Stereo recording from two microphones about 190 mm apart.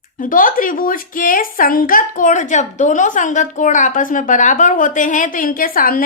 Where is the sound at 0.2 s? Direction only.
45° left (ahead or behind).